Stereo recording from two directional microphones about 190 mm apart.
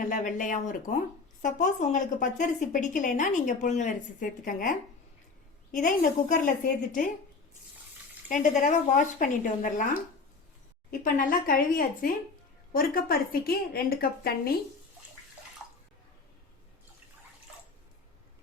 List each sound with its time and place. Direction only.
0.1 s a woman's voice: 40° left (ahead or behind)
5.7 s a woman's voice: 45° left (ahead or behind)
8.3 s speech: 40° left (ahead or behind)
11.0 s a woman's voice: 45° left (ahead or behind)